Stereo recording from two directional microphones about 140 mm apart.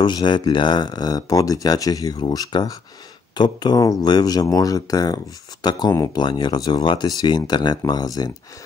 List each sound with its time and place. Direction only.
0.0 s speech: 30° left (ahead or behind)